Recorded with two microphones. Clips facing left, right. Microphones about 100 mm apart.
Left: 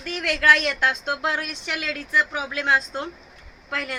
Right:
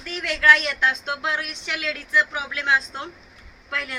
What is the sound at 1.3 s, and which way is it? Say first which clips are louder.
A woman's voice: left 1 dB; 45° left (ahead or behind).